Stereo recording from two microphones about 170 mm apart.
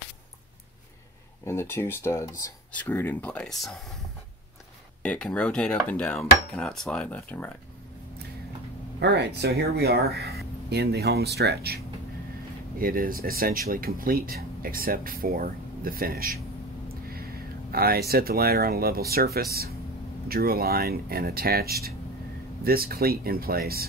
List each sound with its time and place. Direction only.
1.4 s dishes: 15° left (ahead or behind)
5.0 s dishes: 5° left (ahead or behind)
9.0 s speech: 85° right
12.7 s speech: 55° right (ahead or behind)
17.6 s speech: 60° right (ahead or behind)